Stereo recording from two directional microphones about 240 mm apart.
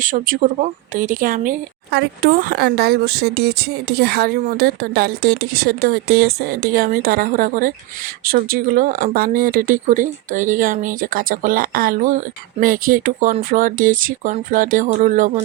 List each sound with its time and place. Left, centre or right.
0.0 s speech: right